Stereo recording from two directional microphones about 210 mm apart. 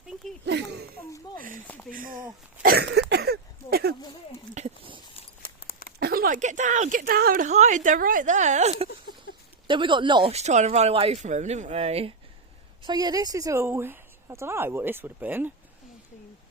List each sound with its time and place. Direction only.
1.9 s a woman's voice: 40° right (ahead or behind)
4.5 s a sound: 30° right (ahead or behind)
6.0 s a woman's voice: 45° right (ahead or behind); by 15.5 s 10° right (ahead or behind)